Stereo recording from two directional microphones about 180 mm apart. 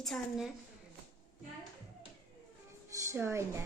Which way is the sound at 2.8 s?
15° right (ahead or behind).